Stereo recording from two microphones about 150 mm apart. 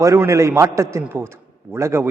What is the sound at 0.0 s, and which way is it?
A man's voice, 20° right (ahead or behind).